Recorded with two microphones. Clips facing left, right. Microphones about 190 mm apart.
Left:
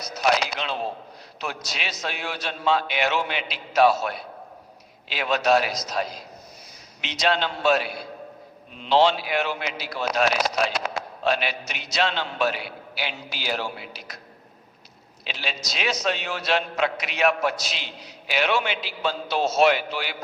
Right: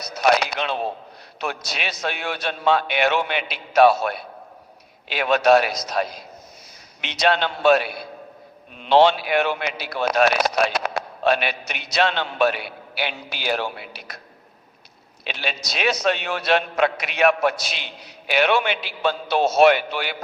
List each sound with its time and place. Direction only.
0.0 s speech: 60° right (ahead or behind)
15.2 s speech: 60° right (ahead or behind)